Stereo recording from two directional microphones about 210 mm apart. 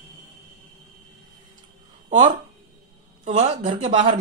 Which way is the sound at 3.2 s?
30° right (ahead or behind).